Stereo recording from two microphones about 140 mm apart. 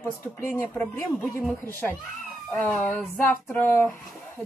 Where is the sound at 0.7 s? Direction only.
Centre (ahead or behind).